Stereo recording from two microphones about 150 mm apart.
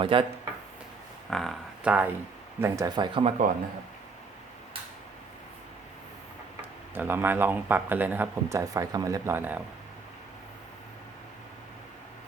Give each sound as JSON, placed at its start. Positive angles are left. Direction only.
{"t": 0.0, "sound": "speech", "side_deg": -35}
{"t": 1.3, "sound": "speech", "side_deg": 5}
{"t": 1.8, "sound": "speech", "side_deg": -10}
{"t": 2.6, "sound": "speech", "side_deg": -20}
{"t": 6.9, "sound": "speech", "side_deg": -15}